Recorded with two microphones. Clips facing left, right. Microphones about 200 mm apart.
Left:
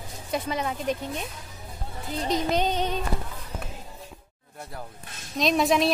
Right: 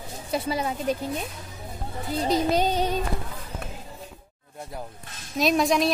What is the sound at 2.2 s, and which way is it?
Speech, 35° right (ahead or behind).